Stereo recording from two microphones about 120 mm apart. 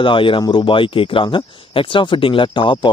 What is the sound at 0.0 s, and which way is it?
A man's voice, 45° left (ahead or behind).